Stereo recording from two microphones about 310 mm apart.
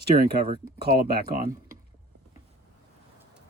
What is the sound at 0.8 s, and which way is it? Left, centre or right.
Speech, right.